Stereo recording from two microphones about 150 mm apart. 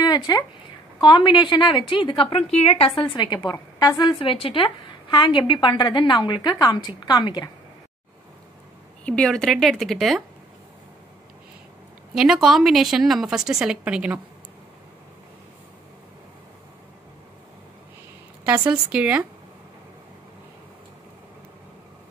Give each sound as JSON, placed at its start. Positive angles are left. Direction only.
{"t": 0.0, "sound": "a sound", "side_deg": 25}
{"t": 1.0, "sound": "a woman's voice", "side_deg": 30}
{"t": 3.2, "sound": "a woman's voice", "side_deg": 30}
{"t": 9.0, "sound": "a woman's voice", "side_deg": 5}
{"t": 12.1, "sound": "a woman's voice", "side_deg": 0}
{"t": 18.7, "sound": "speech", "side_deg": -10}